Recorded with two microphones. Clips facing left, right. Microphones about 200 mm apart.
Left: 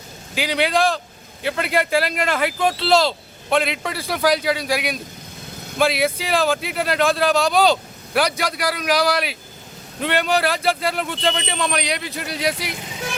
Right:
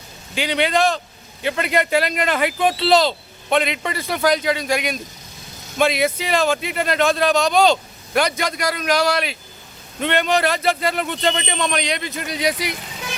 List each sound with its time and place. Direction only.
0.3 s speech: 5° left (ahead or behind)